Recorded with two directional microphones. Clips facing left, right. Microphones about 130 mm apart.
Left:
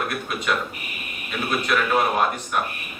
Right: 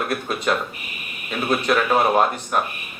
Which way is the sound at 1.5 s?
35° right (ahead or behind).